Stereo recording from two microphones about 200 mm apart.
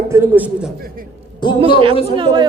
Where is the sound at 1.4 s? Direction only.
20° left (ahead or behind).